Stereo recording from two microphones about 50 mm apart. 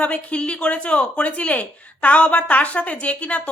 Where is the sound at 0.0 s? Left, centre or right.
Left.